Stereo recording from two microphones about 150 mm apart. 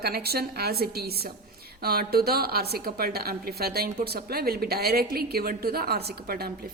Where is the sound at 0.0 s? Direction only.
90° right.